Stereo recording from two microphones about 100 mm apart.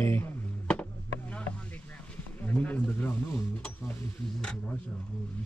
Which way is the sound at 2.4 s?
15° left (ahead or behind).